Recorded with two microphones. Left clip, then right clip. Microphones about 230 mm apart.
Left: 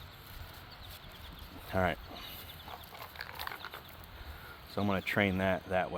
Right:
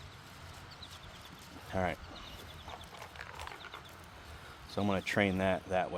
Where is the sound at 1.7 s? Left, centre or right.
Left.